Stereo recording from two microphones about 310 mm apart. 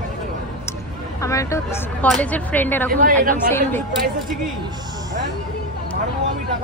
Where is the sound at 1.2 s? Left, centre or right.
Centre.